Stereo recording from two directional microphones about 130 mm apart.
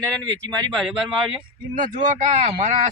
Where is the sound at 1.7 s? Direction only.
80° right.